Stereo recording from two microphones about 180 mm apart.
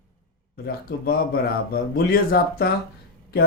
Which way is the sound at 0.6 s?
55° left (ahead or behind).